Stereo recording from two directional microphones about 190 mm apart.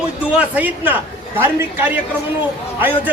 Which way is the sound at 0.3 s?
10° right (ahead or behind).